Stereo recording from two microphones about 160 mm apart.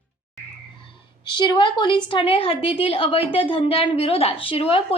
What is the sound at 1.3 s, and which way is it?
A woman's voice, 30° left (ahead or behind).